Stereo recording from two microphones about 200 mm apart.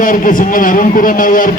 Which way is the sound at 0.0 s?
40° left (ahead or behind).